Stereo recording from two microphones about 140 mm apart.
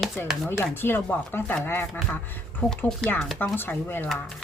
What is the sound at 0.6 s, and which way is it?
Speech, 15° left (ahead or behind).